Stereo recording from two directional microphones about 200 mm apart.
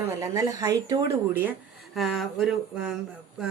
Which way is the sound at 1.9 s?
Centre (ahead or behind).